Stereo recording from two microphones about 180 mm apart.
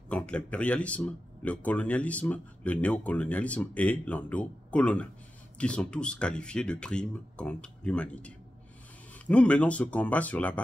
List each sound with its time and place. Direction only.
0.1 s speech: 5° left (ahead or behind)